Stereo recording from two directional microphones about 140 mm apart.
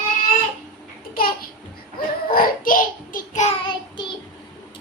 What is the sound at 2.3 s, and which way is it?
Child singing, 85° left.